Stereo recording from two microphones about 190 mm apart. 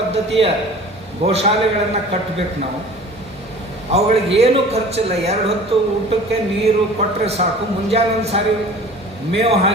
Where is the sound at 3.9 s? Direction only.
30° right (ahead or behind).